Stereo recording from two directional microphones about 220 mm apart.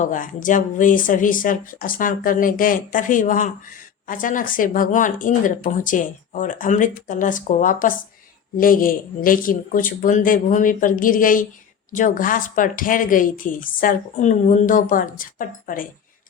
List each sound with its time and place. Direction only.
0.0 s speech: 35° left (ahead or behind)